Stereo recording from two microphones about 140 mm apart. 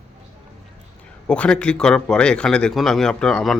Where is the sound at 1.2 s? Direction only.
5° left (ahead or behind).